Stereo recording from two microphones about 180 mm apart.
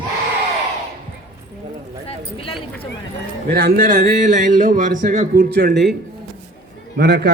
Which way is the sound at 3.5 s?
55° right (ahead or behind).